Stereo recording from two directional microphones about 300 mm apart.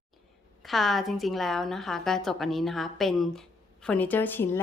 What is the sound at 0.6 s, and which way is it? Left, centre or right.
A woman's voice, centre.